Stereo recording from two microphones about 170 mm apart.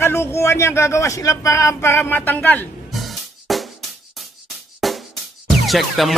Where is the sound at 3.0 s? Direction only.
Centre (ahead or behind).